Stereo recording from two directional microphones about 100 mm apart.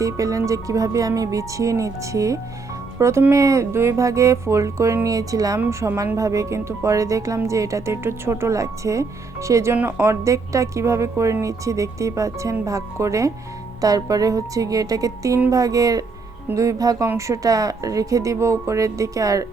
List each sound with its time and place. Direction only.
0.0 s speech: 35° right (ahead or behind)